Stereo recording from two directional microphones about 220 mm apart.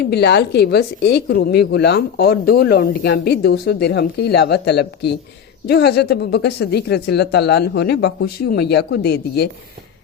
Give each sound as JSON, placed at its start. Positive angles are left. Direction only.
{"t": 0.1, "sound": "a woman's voice", "side_deg": 50}